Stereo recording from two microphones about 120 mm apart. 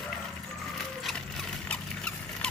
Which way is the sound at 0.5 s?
Centre (ahead or behind).